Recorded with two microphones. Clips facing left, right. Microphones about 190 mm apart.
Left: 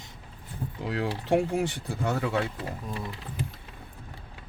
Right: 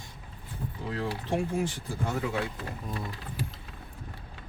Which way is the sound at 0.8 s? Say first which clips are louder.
Left 3 dB; 70° left (ahead or behind).